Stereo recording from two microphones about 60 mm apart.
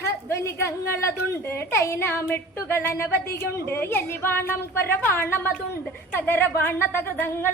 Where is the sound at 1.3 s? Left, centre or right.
Left.